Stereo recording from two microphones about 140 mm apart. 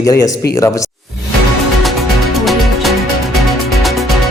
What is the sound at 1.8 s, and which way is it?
Music, centre (ahead or behind).